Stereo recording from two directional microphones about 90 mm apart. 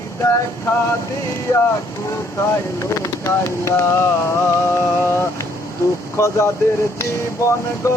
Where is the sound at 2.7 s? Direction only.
30° left (ahead or behind).